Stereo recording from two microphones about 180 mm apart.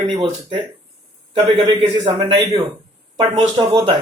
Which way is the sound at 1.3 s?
30° right (ahead or behind).